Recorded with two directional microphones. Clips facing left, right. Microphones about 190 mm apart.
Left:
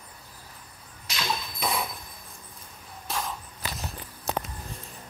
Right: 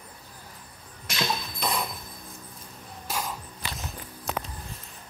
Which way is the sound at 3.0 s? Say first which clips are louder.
Even; 5° right (ahead or behind).